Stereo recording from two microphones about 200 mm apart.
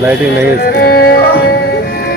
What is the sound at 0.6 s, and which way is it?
Music, 50° left (ahead or behind).